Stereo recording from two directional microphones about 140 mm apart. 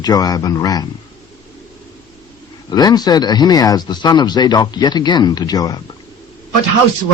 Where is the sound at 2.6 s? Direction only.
30° left (ahead or behind).